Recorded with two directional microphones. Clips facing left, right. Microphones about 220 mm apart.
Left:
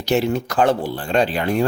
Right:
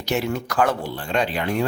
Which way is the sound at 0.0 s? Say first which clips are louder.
Left 5 dB; 30° left (ahead or behind).